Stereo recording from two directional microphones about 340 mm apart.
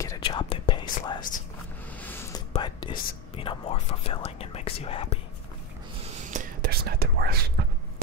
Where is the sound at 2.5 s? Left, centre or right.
Centre.